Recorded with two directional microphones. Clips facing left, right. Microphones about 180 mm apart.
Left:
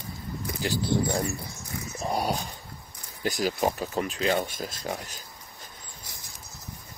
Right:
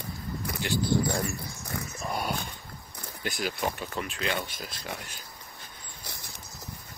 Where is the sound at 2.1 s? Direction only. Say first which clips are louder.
Left 4 dB; 35° left (ahead or behind).